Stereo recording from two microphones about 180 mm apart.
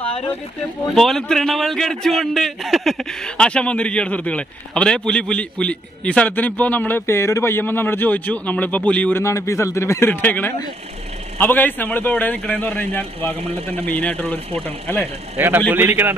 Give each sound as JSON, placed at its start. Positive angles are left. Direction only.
{"t": 0.0, "sound": "a sound", "side_deg": 30}
{"t": 0.9, "sound": "a man's voice", "side_deg": 0}
{"t": 13.4, "sound": "speech", "side_deg": -35}
{"t": 13.7, "sound": "a man's voice", "side_deg": 10}
{"t": 15.3, "sound": "a man's voice", "side_deg": -10}